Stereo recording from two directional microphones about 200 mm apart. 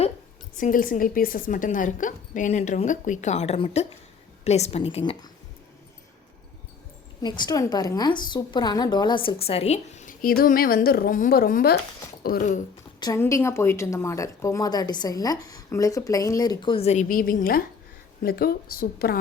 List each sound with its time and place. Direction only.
0.6 s a woman's voice: 45° left (ahead or behind); by 5.3 s 25° left (ahead or behind)
7.2 s a woman's voice: 20° left (ahead or behind); by 12.5 s 45° left (ahead or behind)
13.0 s a woman's voice: 15° left (ahead or behind); by 19.2 s 50° left (ahead or behind)